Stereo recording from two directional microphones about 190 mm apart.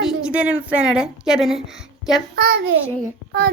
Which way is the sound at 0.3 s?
5° right (ahead or behind).